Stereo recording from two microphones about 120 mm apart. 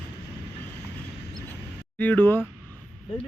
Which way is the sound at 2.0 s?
15° left (ahead or behind).